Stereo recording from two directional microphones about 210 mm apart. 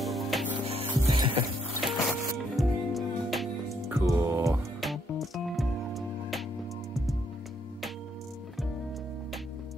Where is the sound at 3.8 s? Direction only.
15° right (ahead or behind).